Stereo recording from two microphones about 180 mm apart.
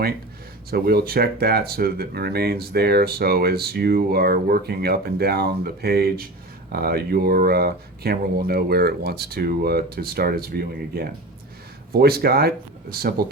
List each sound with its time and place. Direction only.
0.7 s speech: 60° right (ahead or behind)